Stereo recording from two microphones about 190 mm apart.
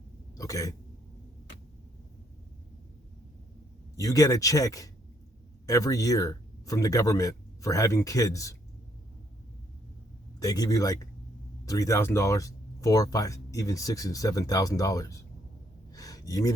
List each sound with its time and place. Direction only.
0.3 s throat clearing: 15° left (ahead or behind)
3.9 s speech: 20° left (ahead or behind)
10.4 s speech: 20° left (ahead or behind)
15.9 s gasp: 20° left (ahead or behind)